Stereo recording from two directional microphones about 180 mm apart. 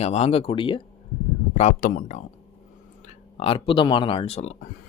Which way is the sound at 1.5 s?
45° left (ahead or behind).